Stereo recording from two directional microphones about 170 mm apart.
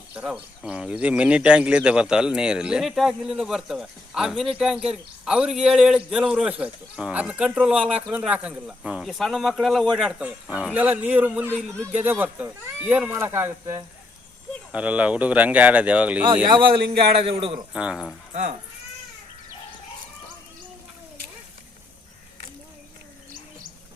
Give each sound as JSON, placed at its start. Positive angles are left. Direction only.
{"t": 0.1, "sound": "speech", "side_deg": -5}
{"t": 16.5, "sound": "a man's voice", "side_deg": -30}
{"t": 17.7, "sound": "speech", "side_deg": -5}